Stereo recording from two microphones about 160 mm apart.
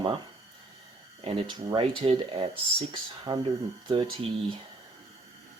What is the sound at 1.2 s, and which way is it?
Speech, 30° right (ahead or behind).